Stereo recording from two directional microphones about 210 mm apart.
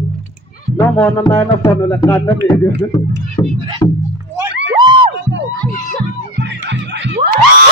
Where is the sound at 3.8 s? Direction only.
15° left (ahead or behind).